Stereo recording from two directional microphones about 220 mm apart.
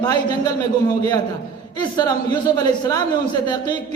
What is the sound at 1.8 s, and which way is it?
A man's voice, 20° left (ahead or behind).